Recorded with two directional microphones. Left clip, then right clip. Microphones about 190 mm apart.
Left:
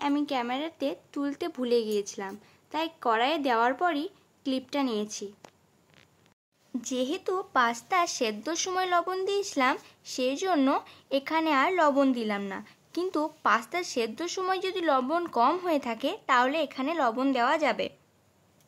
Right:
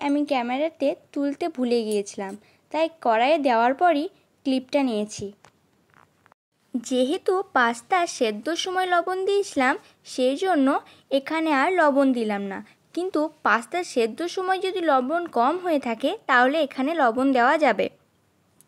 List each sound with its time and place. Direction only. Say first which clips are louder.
0.0 s speech: right 5 dB; 20° right (ahead or behind)
6.8 s a woman's voice: right 7 dB; 25° right (ahead or behind)